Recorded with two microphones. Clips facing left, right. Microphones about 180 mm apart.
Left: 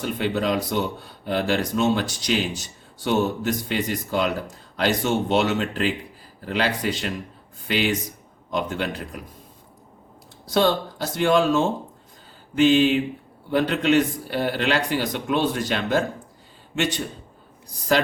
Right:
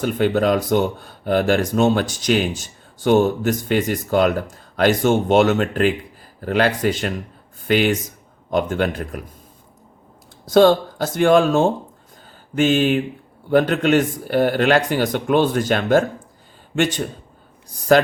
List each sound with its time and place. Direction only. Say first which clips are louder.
0.0 s speech: right 6 dB; 50° right (ahead or behind)
10.4 s a man's voice: right 7 dB; 45° right (ahead or behind)